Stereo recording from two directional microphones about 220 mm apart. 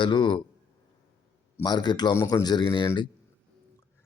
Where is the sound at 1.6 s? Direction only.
20° left (ahead or behind).